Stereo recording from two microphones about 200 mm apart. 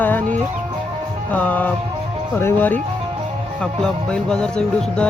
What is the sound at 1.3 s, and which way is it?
Speech, 10° left (ahead or behind).